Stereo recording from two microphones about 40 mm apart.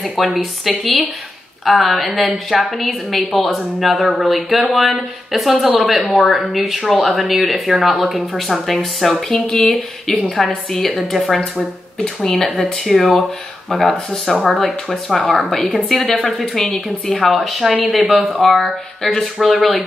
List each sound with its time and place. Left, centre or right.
0.4 s speech: centre
12.0 s speech: centre
12.8 s speech: centre